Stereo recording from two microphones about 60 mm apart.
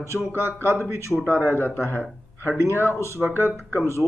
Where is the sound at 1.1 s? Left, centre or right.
Right.